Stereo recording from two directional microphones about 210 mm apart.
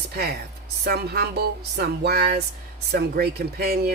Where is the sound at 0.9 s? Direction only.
50° right (ahead or behind).